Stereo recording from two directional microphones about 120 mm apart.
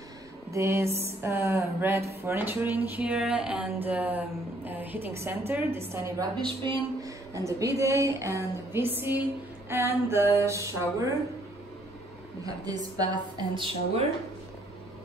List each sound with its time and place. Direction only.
0.5 s a sound: 25° right (ahead or behind)
0.9 s speech: 20° right (ahead or behind)
6.4 s a woman's voice: 40° right (ahead or behind)
7.1 s speech: 25° right (ahead or behind)
12.4 s a woman's voice: 30° right (ahead or behind)